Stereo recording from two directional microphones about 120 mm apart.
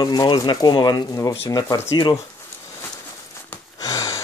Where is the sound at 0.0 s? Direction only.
35° left (ahead or behind).